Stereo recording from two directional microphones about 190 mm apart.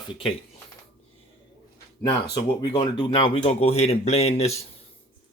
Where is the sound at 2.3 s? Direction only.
20° left (ahead or behind).